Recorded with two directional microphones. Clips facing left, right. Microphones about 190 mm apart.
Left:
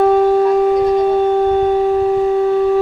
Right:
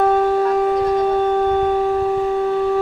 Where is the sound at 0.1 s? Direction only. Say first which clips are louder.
Left 4 dB; 15° left (ahead or behind).